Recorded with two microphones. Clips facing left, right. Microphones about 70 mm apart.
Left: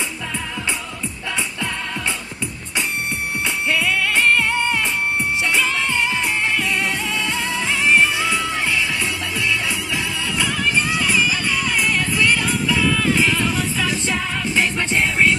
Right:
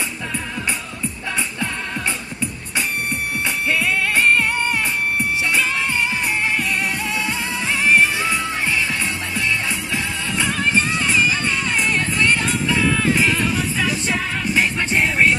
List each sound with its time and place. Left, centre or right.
3.6 s music: right